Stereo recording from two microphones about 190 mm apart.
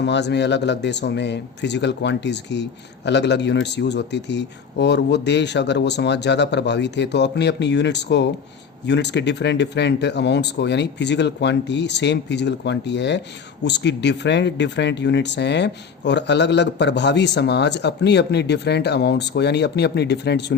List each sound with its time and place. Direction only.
0.0 s speech: 65° left (ahead or behind)